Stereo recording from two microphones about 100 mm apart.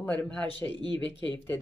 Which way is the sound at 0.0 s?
15° left (ahead or behind).